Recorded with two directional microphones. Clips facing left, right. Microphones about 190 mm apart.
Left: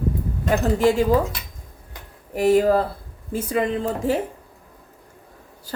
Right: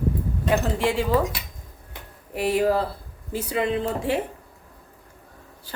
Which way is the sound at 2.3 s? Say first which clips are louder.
Left 5 dB; 45° left (ahead or behind).